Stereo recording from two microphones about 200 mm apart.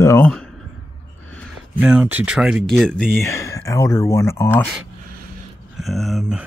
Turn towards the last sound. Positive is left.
turn(degrees=0)  # may be behind; listen again after turning